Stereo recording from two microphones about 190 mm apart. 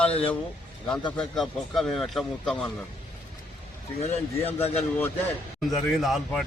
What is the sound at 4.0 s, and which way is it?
Speech, 35° left (ahead or behind).